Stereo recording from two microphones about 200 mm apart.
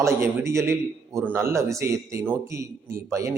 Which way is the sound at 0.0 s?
15° right (ahead or behind).